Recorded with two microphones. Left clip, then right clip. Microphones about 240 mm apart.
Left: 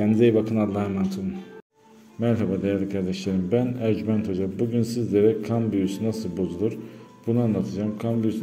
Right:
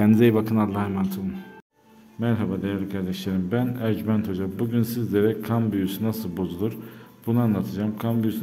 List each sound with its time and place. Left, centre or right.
0.0 s a man's voice: right